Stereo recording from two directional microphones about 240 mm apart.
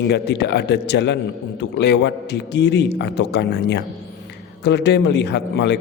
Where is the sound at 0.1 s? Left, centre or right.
Left.